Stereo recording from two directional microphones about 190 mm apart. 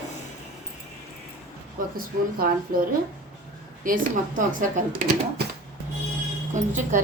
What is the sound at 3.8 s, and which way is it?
A woman's voice, 45° right (ahead or behind).